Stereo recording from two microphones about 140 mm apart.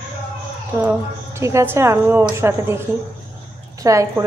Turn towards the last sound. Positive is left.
turn(degrees=-20)  # may be behind; listen again after turning